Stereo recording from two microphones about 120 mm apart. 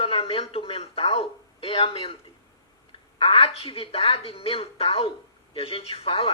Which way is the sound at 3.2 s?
50° left (ahead or behind).